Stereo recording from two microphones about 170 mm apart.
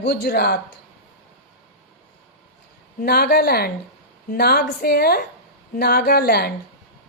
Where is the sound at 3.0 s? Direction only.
65° left (ahead or behind).